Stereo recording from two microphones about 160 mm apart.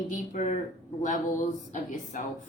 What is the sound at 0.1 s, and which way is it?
Speech, 50° left (ahead or behind).